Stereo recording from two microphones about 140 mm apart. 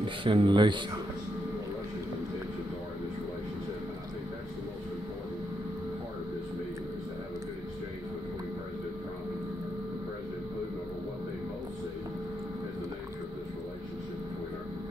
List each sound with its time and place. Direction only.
0.0 s speech: 40° right (ahead or behind)